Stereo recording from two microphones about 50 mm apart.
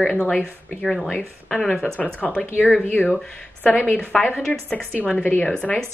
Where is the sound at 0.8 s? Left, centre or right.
Centre.